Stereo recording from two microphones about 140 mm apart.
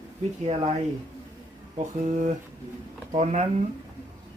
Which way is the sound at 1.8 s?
55° right (ahead or behind).